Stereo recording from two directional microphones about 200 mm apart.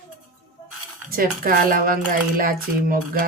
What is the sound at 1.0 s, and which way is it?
Speech, 45° right (ahead or behind).